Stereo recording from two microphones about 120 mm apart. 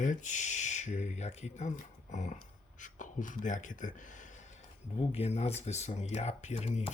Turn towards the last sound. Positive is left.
turn(degrees=60)  # may be behind; listen again after turning